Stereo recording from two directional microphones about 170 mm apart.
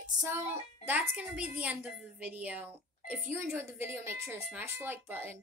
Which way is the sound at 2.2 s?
10° right (ahead or behind).